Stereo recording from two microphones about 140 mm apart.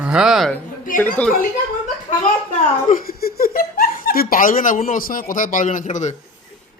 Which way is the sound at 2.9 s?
90° left.